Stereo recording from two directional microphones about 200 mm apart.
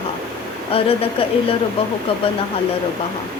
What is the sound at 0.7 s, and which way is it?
Speech, 30° left (ahead or behind).